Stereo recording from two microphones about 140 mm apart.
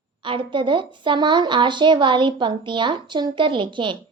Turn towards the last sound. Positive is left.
turn(degrees=-35)  # may be behind; listen again after turning